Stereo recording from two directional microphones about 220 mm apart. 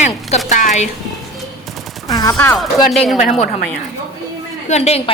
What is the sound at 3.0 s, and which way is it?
Speech, centre (ahead or behind).